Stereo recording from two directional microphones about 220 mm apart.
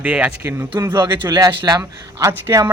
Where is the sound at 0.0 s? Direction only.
5° right (ahead or behind).